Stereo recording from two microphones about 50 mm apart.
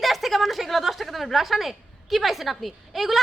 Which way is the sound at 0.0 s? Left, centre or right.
Centre.